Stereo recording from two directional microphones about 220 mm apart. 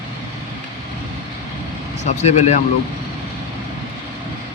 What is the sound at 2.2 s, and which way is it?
Speech, 30° left (ahead or behind).